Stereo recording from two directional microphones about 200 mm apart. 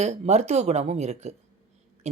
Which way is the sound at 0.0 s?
35° right (ahead or behind).